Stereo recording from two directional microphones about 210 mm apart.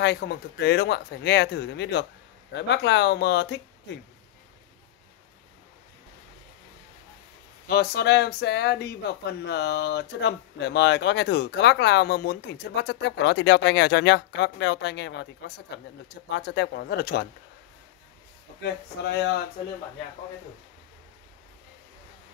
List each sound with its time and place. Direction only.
0.0 s speech: 55° left (ahead or behind)
7.6 s speech: 50° left (ahead or behind)